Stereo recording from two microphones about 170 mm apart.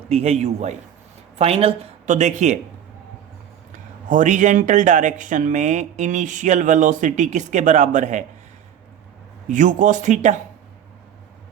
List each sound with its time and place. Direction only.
0.1 s a man's voice: 40° right (ahead or behind)
3.7 s speech: 50° right (ahead or behind)
9.5 s speech: 50° right (ahead or behind)